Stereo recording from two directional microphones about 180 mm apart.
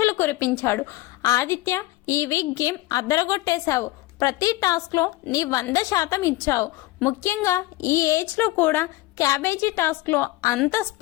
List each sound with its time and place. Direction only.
0.0 s a woman's voice: 15° left (ahead or behind)